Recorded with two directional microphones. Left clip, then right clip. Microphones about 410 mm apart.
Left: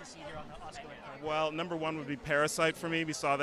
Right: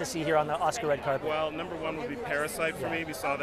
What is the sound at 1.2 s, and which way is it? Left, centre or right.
Speech, left.